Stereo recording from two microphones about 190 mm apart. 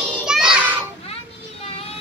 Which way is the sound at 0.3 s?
5° right (ahead or behind).